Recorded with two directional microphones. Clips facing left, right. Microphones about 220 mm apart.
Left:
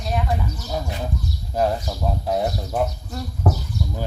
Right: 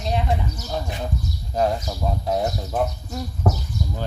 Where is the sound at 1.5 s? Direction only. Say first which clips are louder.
Even; 5° left (ahead or behind).